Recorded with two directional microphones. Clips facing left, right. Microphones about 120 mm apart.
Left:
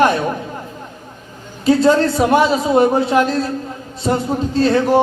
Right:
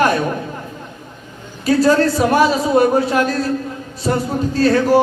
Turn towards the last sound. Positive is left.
turn(degrees=20)  # may be behind; listen again after turning